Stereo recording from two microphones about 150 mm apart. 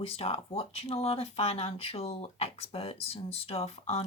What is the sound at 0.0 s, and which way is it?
Speech, 40° left (ahead or behind).